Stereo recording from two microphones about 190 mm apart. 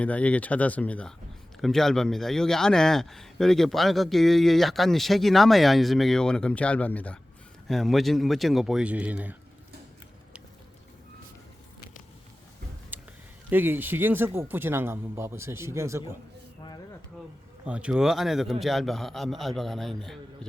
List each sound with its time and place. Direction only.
0.0 s a man's voice: 5° left (ahead or behind)
12.9 s a sound: 10° right (ahead or behind)
13.5 s speech: 10° right (ahead or behind)
17.7 s a man's voice: 5° right (ahead or behind)